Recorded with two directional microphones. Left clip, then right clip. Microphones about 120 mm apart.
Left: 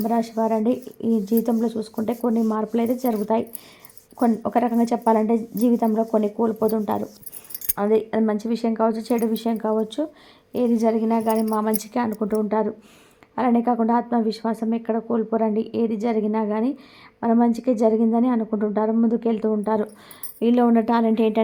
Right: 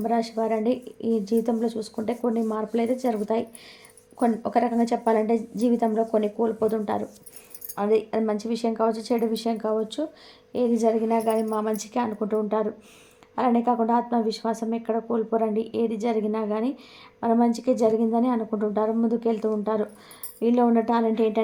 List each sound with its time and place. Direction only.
0.1 s a woman's voice: 35° left (ahead or behind)